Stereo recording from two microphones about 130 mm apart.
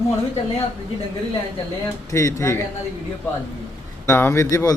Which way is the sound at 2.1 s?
25° left (ahead or behind).